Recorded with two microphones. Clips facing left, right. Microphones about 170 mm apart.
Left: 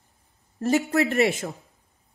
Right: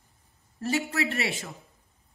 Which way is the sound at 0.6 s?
40° left (ahead or behind).